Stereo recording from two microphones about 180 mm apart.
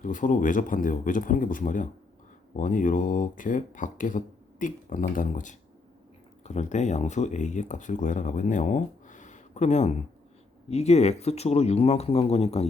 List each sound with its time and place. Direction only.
0.0 s speech: 45° left (ahead or behind)